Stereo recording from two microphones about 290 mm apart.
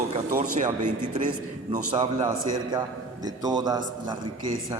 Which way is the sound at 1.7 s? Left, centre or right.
Centre.